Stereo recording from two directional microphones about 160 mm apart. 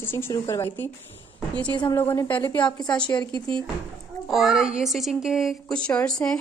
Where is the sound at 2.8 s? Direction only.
25° left (ahead or behind).